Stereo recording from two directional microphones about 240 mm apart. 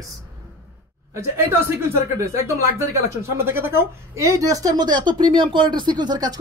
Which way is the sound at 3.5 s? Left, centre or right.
Centre.